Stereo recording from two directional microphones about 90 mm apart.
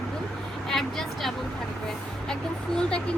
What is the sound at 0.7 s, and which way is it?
Speech, 5° left (ahead or behind).